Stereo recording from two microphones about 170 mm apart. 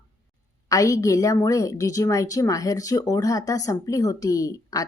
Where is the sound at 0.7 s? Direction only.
20° left (ahead or behind).